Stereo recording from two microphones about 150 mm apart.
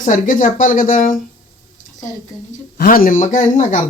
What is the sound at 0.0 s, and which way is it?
Speech, 60° left (ahead or behind).